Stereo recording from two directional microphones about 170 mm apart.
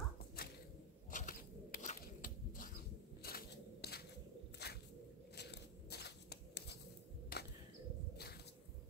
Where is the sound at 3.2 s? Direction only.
65° left (ahead or behind).